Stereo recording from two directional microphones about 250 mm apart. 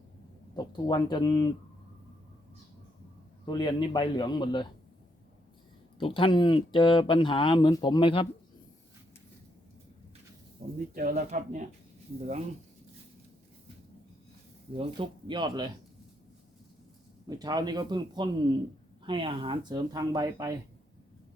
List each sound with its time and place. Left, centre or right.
0.5 s a man's voice: centre
3.4 s a man's voice: centre
6.0 s speech: left
10.6 s speech: right
14.8 s speech: centre
17.2 s speech: centre